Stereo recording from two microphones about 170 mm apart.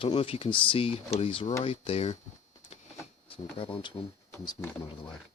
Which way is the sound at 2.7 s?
35° left (ahead or behind).